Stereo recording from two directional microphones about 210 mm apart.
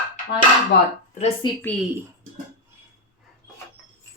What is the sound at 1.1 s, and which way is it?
Speech, 30° left (ahead or behind).